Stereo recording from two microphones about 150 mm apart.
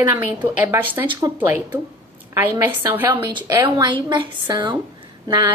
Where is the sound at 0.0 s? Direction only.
15° right (ahead or behind).